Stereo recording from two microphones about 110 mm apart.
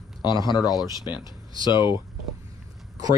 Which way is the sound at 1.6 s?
45° left (ahead or behind).